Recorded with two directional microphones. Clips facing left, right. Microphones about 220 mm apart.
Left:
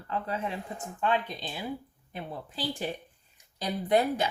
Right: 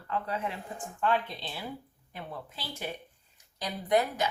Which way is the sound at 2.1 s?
30° left (ahead or behind).